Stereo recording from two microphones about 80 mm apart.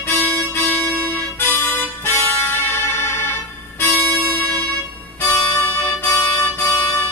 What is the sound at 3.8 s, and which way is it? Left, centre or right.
Music, left.